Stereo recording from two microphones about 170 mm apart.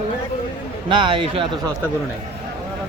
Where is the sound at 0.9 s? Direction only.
30° right (ahead or behind).